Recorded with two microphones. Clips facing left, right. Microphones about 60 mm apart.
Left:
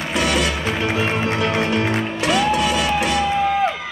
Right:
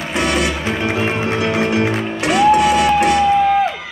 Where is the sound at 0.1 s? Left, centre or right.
Right.